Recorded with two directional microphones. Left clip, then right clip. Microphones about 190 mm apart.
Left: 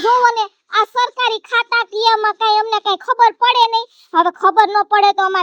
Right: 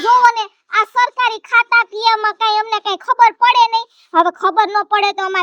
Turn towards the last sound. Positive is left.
turn(degrees=-35)  # may be behind; listen again after turning